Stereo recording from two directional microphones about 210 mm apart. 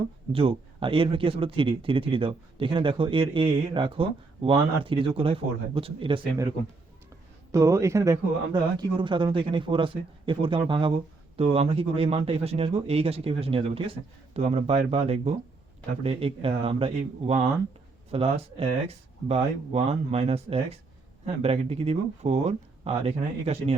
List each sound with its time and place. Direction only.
0.3 s speech: 25° right (ahead or behind)
7.5 s speech: 15° right (ahead or behind); by 23.7 s 30° right (ahead or behind)